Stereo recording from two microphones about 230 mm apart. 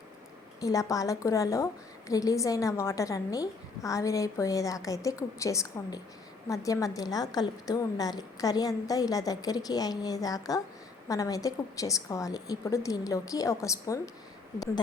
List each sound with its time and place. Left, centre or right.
0.6 s a woman's voice: centre